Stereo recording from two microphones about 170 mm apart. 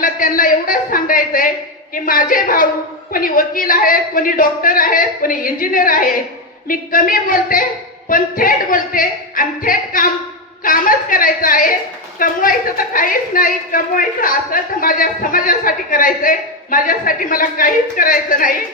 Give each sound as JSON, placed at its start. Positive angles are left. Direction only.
{"t": 0.0, "sound": "a woman's voice", "side_deg": 55}